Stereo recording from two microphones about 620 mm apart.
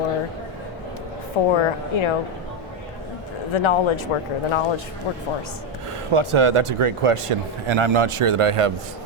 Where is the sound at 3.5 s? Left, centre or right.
Left.